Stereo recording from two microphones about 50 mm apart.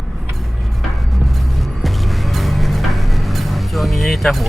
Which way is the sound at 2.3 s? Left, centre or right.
Centre.